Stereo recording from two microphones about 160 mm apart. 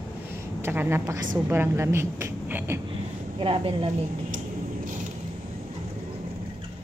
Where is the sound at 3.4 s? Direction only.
35° right (ahead or behind).